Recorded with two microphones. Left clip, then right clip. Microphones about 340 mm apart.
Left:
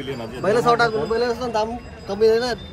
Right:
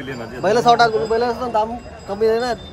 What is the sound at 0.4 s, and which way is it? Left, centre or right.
Speech, right.